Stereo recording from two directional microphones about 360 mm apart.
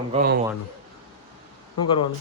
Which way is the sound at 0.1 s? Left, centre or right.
Right.